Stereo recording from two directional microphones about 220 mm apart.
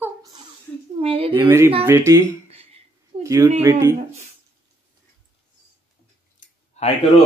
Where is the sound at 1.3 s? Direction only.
10° right (ahead or behind).